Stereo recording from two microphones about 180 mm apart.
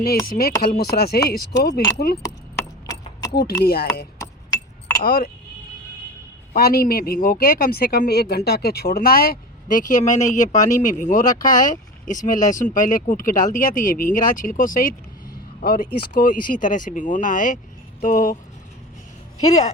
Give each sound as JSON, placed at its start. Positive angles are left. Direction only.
{"t": 0.3, "sound": "speech", "side_deg": 55}
{"t": 3.6, "sound": "speech", "side_deg": 60}
{"t": 4.5, "sound": "chink", "side_deg": 20}
{"t": 5.0, "sound": "speech", "side_deg": 55}
{"t": 6.5, "sound": "speech", "side_deg": 60}
{"t": 19.5, "sound": "speech", "side_deg": 20}